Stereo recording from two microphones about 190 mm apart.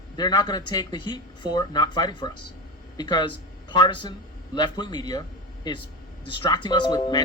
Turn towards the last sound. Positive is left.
turn(degrees=25)  # may be behind; listen again after turning